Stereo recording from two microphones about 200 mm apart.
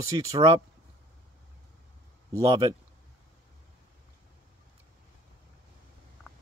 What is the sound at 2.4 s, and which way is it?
Speech, 20° right (ahead or behind).